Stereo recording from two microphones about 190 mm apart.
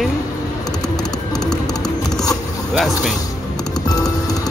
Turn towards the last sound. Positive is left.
turn(degrees=20)  # may be behind; listen again after turning